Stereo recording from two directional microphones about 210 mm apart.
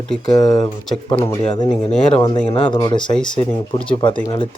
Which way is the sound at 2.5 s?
25° left (ahead or behind).